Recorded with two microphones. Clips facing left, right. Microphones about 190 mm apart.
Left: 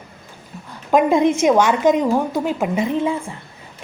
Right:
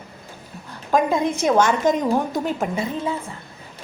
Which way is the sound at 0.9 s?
20° left (ahead or behind).